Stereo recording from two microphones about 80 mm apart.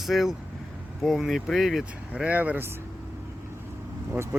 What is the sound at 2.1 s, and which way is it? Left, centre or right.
Speech, centre.